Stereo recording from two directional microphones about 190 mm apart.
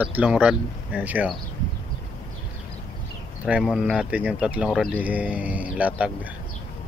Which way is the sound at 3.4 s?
5° right (ahead or behind).